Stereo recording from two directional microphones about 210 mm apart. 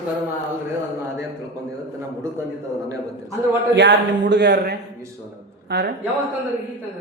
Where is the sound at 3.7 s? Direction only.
55° right (ahead or behind).